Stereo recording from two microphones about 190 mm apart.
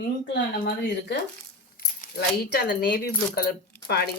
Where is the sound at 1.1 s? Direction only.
70° left (ahead or behind).